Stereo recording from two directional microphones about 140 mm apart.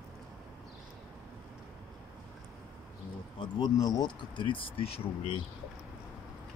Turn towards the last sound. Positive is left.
turn(degrees=40)  # may be behind; listen again after turning